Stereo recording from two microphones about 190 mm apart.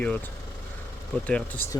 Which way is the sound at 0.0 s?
10° left (ahead or behind).